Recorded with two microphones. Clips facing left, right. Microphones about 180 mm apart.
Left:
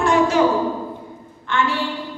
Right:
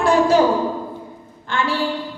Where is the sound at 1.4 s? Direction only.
35° right (ahead or behind).